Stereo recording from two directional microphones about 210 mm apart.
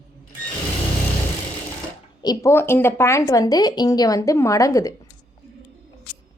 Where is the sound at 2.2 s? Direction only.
15° left (ahead or behind).